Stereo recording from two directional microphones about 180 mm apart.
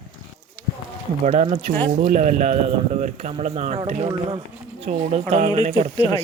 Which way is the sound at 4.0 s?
30° right (ahead or behind).